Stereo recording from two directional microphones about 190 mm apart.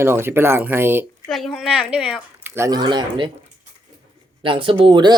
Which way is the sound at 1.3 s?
Centre (ahead or behind).